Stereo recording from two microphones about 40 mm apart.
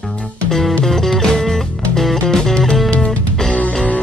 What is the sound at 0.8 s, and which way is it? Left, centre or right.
Music, centre.